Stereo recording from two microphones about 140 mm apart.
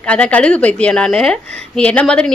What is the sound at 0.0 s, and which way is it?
A woman's voice, 10° left (ahead or behind).